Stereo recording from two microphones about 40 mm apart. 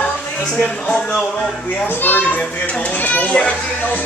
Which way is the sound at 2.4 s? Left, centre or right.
Left.